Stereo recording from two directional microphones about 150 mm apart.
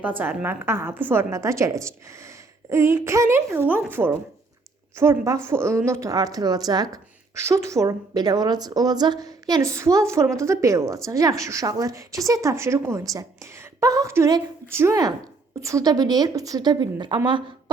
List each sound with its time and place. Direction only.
0.2 s a woman's voice: 15° right (ahead or behind); by 17.2 s 30° right (ahead or behind)